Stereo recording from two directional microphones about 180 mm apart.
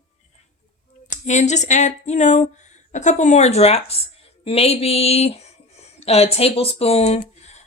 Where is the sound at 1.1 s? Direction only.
40° left (ahead or behind).